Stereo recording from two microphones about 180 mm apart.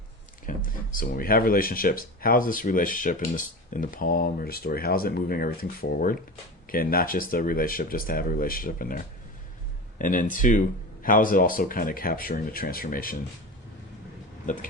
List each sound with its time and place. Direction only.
0.4 s speech: 50° left (ahead or behind)
10.0 s speech: 45° left (ahead or behind)
14.4 s speech: 45° left (ahead or behind)